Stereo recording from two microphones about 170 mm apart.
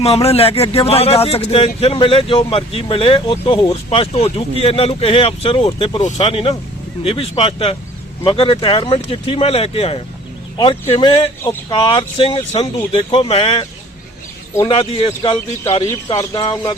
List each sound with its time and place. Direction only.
0.0 s a man's voice: 35° left (ahead or behind)
14.7 s speech: 35° left (ahead or behind)